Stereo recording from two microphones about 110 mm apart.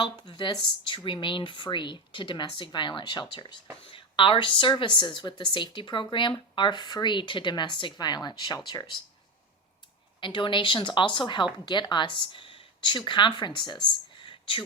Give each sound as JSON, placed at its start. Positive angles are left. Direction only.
{"t": 0.0, "sound": "speech", "side_deg": 45}
{"t": 10.2, "sound": "a woman's voice", "side_deg": 50}